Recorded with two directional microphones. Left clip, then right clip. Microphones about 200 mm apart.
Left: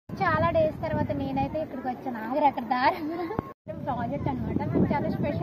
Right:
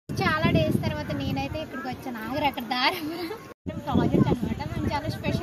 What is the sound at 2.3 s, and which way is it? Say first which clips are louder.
Speech: left 3 dB; 5° right (ahead or behind).